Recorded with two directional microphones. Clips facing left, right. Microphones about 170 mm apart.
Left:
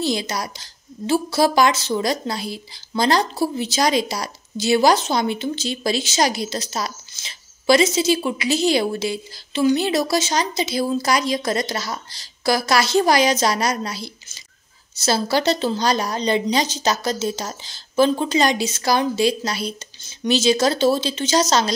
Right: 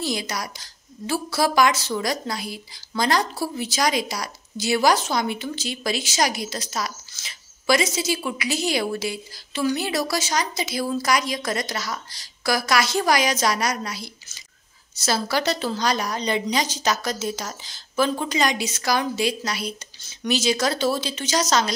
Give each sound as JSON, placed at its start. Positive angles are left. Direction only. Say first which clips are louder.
{"t": 0.0, "sound": "a woman's voice", "louder": "left 4 dB", "side_deg": 25}